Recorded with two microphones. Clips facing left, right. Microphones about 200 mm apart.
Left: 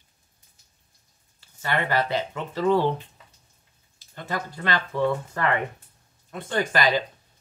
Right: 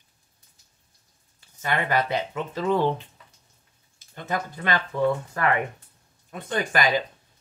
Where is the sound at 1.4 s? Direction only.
15° right (ahead or behind).